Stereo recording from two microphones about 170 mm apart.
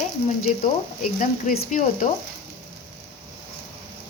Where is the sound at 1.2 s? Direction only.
55° left (ahead or behind).